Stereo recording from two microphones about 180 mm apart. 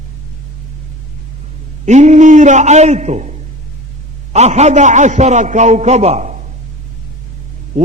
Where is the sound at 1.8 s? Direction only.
40° right (ahead or behind).